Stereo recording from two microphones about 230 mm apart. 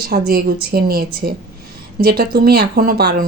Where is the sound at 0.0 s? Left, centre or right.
Right.